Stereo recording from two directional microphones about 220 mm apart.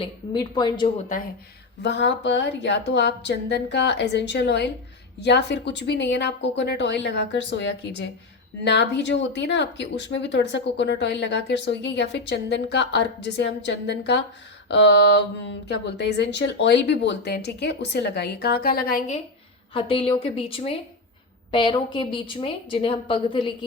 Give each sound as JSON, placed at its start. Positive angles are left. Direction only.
{"t": 0.0, "sound": "a woman's voice", "side_deg": 20}
{"t": 1.8, "sound": "a woman's voice", "side_deg": 50}
{"t": 19.7, "sound": "a woman's voice", "side_deg": 25}